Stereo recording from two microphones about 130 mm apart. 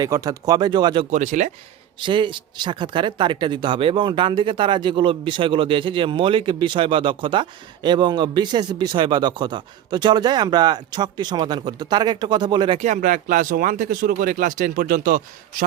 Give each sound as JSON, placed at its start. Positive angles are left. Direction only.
{"t": 0.0, "sound": "speech", "side_deg": -25}
{"t": 1.1, "sound": "speech", "side_deg": -65}
{"t": 2.0, "sound": "speech", "side_deg": -40}
{"t": 12.8, "sound": "speech", "side_deg": -80}